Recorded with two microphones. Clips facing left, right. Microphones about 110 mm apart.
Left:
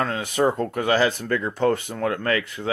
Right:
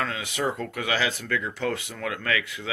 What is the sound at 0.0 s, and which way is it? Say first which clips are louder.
Speech: left 6 dB; 40° left (ahead or behind).